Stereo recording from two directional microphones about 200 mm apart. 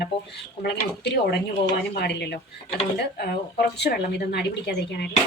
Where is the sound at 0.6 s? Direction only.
55° left (ahead or behind).